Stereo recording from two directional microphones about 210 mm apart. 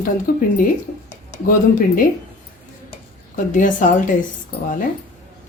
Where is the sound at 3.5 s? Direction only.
40° left (ahead or behind).